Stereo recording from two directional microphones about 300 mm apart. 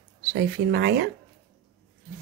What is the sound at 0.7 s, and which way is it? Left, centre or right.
Speech, right.